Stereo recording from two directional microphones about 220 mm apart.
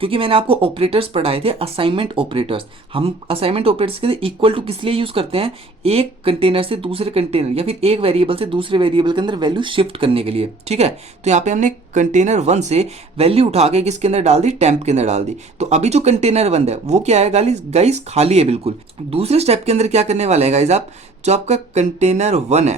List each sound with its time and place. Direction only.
0.0 s speech: 25° right (ahead or behind)